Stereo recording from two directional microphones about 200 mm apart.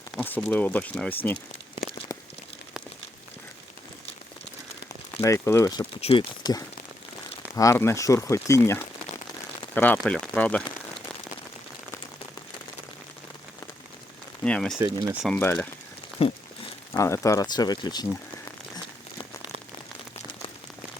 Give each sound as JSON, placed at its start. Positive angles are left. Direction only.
{"t": 0.2, "sound": "speech", "side_deg": 10}
{"t": 5.2, "sound": "speech", "side_deg": 15}
{"t": 6.0, "sound": "speech", "side_deg": 25}
{"t": 14.4, "sound": "speech", "side_deg": 5}
{"t": 14.8, "sound": "speech", "side_deg": -20}
{"t": 15.1, "sound": "speech", "side_deg": 0}
{"t": 15.4, "sound": "speech", "side_deg": 10}
{"t": 16.2, "sound": "speech", "side_deg": 30}
{"t": 16.9, "sound": "speech", "side_deg": 15}